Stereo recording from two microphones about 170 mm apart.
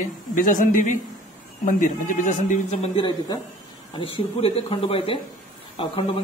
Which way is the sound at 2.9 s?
25° left (ahead or behind).